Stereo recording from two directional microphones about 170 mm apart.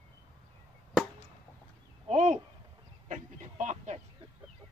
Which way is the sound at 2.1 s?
45° right (ahead or behind).